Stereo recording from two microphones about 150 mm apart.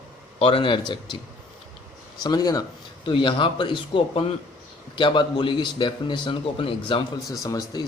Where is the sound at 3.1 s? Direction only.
35° left (ahead or behind).